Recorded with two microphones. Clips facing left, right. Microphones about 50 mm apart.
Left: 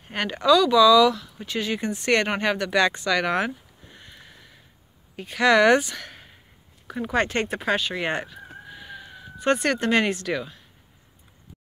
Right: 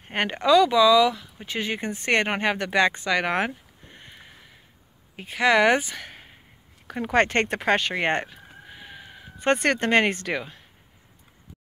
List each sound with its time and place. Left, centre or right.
0.0 s speech: right
6.9 s speech: right
8.6 s a sound: right